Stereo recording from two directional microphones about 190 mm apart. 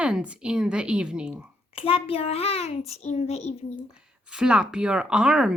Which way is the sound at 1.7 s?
30° left (ahead or behind).